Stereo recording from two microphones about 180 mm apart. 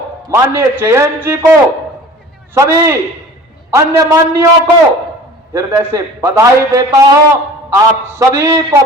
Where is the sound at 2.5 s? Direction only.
15° right (ahead or behind).